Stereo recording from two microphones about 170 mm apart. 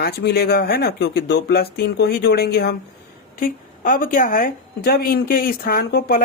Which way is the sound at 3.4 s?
55° left (ahead or behind).